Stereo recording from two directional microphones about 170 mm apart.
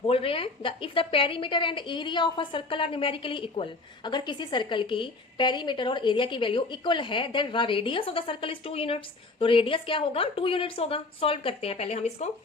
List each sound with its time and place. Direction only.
0.1 s a woman's voice: 35° left (ahead or behind)